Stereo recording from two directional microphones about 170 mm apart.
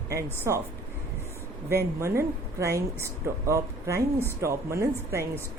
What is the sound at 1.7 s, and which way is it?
Speech, 15° right (ahead or behind).